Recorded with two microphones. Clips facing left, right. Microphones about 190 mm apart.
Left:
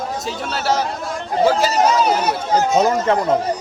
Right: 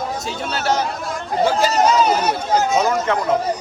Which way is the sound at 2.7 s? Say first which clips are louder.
Left 2 dB; 35° left (ahead or behind).